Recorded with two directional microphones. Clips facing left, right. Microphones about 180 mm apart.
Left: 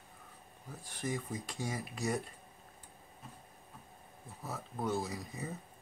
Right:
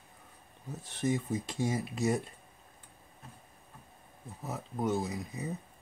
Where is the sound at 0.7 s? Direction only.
25° right (ahead or behind).